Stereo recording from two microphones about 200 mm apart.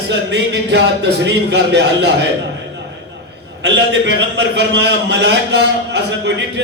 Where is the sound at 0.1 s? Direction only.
60° right (ahead or behind).